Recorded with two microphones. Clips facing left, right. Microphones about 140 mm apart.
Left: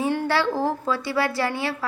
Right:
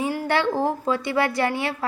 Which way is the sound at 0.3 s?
20° right (ahead or behind).